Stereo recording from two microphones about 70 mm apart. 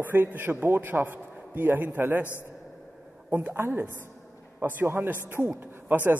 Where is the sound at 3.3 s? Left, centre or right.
Right.